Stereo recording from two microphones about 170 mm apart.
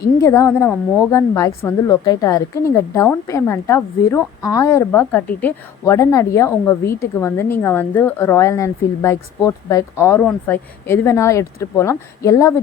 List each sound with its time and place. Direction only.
0.2 s a woman's voice: 15° left (ahead or behind)